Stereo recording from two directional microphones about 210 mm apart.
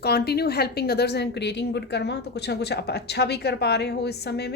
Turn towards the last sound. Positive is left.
turn(degrees=50)  # may be behind; listen again after turning